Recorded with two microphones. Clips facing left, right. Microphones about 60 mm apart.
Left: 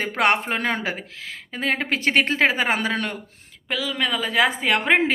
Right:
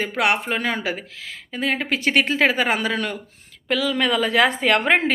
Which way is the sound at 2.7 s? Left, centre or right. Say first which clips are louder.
Right 1 dB; left.